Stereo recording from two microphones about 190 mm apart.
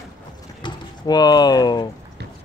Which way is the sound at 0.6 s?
25° left (ahead or behind).